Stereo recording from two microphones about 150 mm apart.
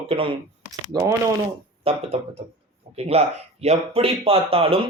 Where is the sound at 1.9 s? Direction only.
40° right (ahead or behind).